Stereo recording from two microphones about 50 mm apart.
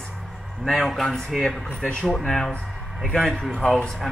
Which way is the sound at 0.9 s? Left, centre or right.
Centre.